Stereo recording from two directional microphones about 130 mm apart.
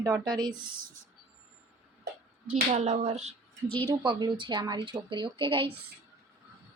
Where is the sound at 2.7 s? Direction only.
60° right (ahead or behind).